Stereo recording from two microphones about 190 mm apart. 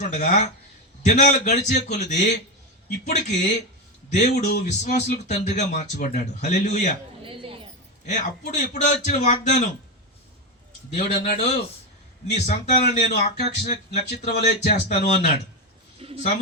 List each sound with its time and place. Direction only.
0.0 s speech: 40° left (ahead or behind)
7.3 s a sound: 30° right (ahead or behind)
8.0 s speech: 40° left (ahead or behind)
10.9 s speech: 35° left (ahead or behind)
14.2 s speech: 55° left (ahead or behind)
14.6 s speech: 40° left (ahead or behind)
16.0 s a sound: 30° right (ahead or behind)